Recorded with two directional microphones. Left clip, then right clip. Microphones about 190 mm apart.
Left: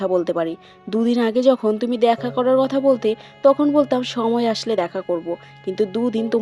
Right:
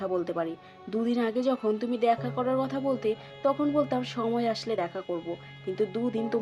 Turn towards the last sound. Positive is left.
turn(degrees=40)  # may be behind; listen again after turning